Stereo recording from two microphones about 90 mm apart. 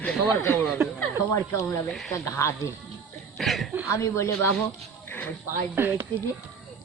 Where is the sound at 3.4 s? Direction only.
Centre (ahead or behind).